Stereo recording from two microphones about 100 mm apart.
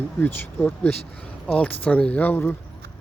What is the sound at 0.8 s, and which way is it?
Speech, 10° left (ahead or behind).